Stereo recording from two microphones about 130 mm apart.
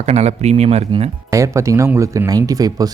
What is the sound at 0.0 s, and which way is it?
Speech, 55° right (ahead or behind).